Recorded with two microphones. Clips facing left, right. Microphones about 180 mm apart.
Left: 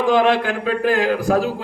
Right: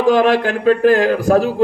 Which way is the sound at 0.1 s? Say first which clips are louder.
Right 3 dB; 45° right (ahead or behind).